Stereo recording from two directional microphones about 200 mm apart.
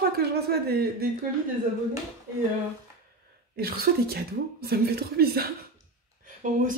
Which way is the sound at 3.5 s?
50° right (ahead or behind).